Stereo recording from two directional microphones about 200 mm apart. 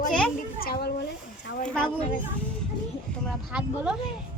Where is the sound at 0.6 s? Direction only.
50° left (ahead or behind).